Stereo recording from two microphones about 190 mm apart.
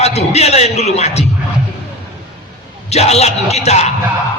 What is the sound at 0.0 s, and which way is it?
A man's voice, 35° left (ahead or behind).